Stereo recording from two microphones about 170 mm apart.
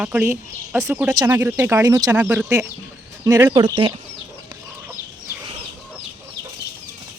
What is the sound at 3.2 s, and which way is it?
Speech, 20° right (ahead or behind).